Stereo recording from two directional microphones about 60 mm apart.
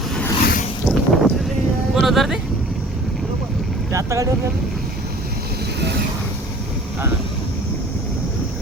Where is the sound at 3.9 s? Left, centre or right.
Right.